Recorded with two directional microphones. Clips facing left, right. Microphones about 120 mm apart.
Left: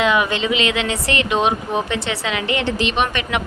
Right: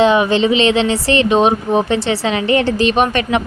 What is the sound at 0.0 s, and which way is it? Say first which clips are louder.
Speech: right 6 dB; 30° right (ahead or behind).